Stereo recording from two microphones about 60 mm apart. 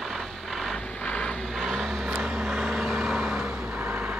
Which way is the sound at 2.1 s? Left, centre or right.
Centre.